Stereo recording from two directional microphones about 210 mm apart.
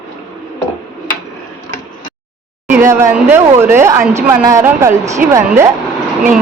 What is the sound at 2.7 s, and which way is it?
Speech, 15° right (ahead or behind).